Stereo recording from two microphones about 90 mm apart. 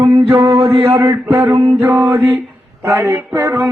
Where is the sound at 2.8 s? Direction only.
30° right (ahead or behind).